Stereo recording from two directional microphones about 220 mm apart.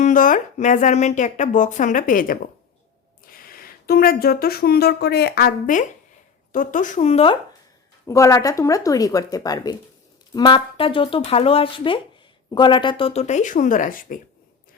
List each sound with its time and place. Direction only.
0.0 s speech: 35° left (ahead or behind)
8.0 s speech: 15° left (ahead or behind); by 14.2 s 40° left (ahead or behind)